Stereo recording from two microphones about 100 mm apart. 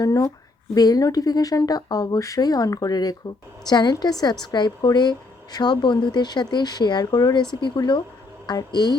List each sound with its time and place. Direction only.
0.0 s a woman's voice: 35° left (ahead or behind)